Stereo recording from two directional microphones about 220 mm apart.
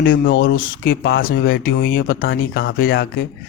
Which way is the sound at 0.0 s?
60° left (ahead or behind).